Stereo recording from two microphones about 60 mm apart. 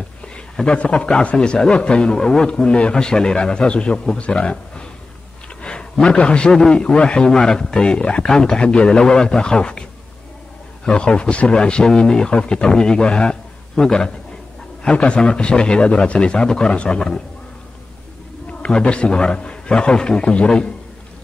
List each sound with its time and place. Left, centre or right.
0.7 s a man's voice: centre
5.6 s a sound: centre
6.1 s a man's voice: centre
10.9 s a man's voice: centre
18.5 s a man's voice: centre